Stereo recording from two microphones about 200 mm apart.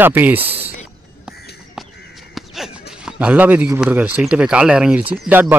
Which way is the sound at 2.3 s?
Centre (ahead or behind).